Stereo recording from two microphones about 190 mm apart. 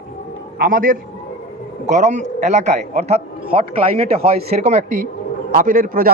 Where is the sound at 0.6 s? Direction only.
50° right (ahead or behind).